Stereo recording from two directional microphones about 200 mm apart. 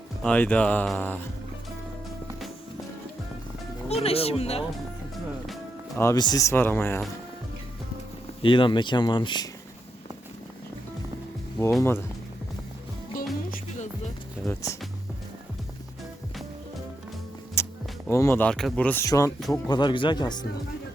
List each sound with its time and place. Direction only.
0.2 s speech: 5° left (ahead or behind)
3.8 s speech: 30° left (ahead or behind)
6.0 s speech: 15° left (ahead or behind)
8.4 s speech: 25° left (ahead or behind)
11.8 s speech: 10° left (ahead or behind)
13.1 s music: 45° left (ahead or behind)
14.4 s speech: 15° left (ahead or behind)
17.6 s music: 15° left (ahead or behind)
18.1 s speech: 15° left (ahead or behind)